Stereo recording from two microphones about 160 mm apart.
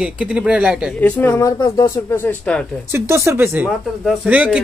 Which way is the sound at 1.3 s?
20° left (ahead or behind).